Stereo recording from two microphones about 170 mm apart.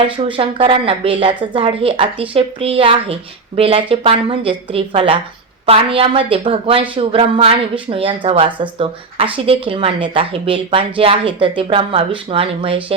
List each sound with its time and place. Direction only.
0.0 s a woman's voice: 30° right (ahead or behind)